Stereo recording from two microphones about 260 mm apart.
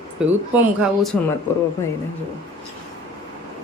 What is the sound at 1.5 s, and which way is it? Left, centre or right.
Speech, centre.